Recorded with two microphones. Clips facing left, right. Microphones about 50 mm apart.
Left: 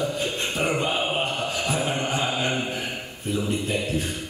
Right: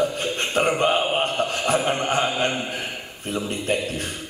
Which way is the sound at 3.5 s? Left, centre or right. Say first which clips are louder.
Right 2 dB; right.